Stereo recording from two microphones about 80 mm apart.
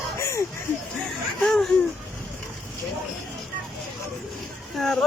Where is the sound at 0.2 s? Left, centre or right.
Left.